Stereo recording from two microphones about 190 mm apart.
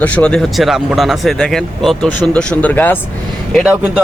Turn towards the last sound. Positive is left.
turn(degrees=-5)  # may be behind; listen again after turning